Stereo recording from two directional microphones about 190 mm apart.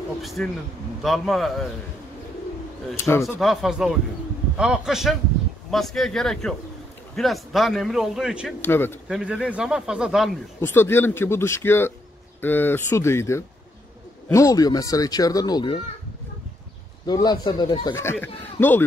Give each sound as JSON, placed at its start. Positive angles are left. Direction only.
{"t": 0.2, "sound": "speech", "side_deg": 0}
{"t": 3.0, "sound": "speech", "side_deg": 15}
{"t": 3.3, "sound": "speech", "side_deg": 0}
{"t": 8.6, "sound": "speech", "side_deg": 10}
{"t": 9.0, "sound": "speech", "side_deg": -5}
{"t": 10.6, "sound": "speech", "side_deg": 10}
{"t": 17.0, "sound": "speech", "side_deg": 20}